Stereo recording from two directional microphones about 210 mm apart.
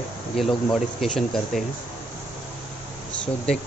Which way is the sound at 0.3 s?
Centre (ahead or behind).